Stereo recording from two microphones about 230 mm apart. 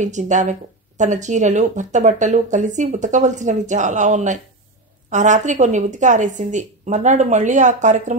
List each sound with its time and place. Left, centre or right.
0.0 s speech: right